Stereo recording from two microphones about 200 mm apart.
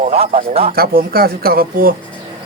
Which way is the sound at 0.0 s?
30° right (ahead or behind).